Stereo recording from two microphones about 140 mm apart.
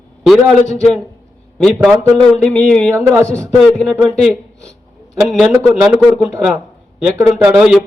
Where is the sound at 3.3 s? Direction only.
10° left (ahead or behind).